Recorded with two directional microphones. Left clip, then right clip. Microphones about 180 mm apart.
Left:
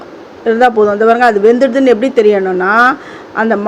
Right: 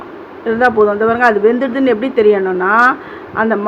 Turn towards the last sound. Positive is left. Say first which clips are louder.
# left 2 dB
turn(degrees=25)  # may be behind; listen again after turning